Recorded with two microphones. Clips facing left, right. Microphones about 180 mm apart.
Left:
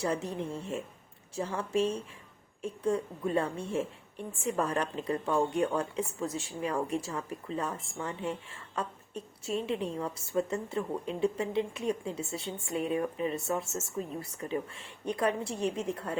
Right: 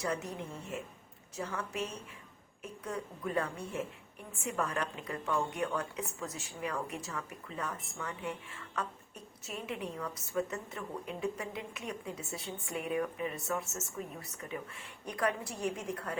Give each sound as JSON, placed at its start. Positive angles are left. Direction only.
{"t": 0.0, "sound": "a woman's voice", "side_deg": 30}